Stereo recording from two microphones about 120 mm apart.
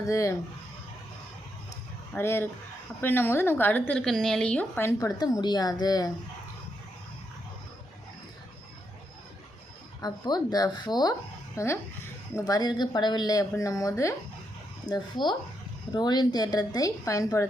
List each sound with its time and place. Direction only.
0.1 s a woman's voice: 25° left (ahead or behind)
2.1 s a woman's voice: 20° left (ahead or behind)
10.0 s speech: 35° left (ahead or behind)
11.5 s a woman's voice: 25° left (ahead or behind)